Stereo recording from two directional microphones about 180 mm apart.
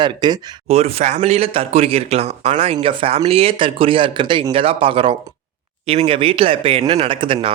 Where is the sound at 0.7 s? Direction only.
35° right (ahead or behind).